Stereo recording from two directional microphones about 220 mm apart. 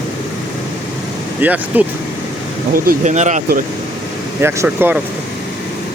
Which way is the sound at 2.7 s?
35° right (ahead or behind).